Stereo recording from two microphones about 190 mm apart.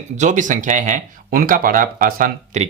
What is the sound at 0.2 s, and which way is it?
Speech, 40° right (ahead or behind).